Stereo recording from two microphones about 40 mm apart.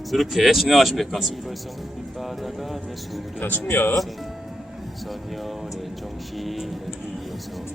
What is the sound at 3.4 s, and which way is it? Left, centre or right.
Speech, left.